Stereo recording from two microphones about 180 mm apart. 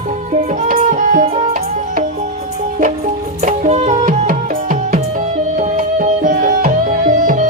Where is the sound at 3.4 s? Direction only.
40° right (ahead or behind).